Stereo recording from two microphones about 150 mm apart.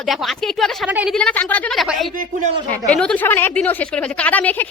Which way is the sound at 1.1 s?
10° left (ahead or behind).